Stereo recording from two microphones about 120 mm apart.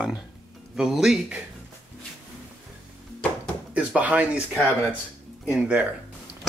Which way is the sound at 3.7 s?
10° right (ahead or behind).